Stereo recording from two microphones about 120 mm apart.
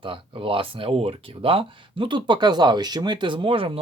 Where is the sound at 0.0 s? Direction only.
45° right (ahead or behind).